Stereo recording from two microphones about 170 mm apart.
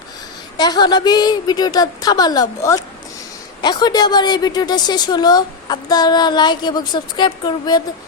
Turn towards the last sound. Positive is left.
turn(degrees=25)  # may be behind; listen again after turning